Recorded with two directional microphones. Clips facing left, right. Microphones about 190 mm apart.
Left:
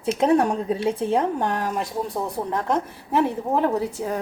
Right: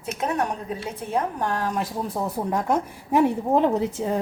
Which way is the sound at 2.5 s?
10° right (ahead or behind).